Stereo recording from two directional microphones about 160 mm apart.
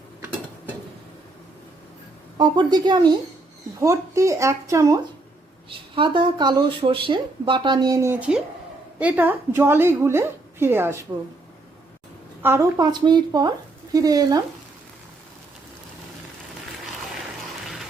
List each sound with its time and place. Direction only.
2.4 s speech: 25° right (ahead or behind)
5.6 s a woman's voice: 30° right (ahead or behind); by 11.0 s 15° right (ahead or behind)
12.4 s speech: 15° right (ahead or behind)